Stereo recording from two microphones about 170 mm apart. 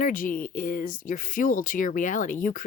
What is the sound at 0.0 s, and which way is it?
Speech, 50° left (ahead or behind).